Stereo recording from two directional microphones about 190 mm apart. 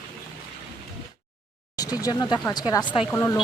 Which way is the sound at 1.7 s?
20° left (ahead or behind).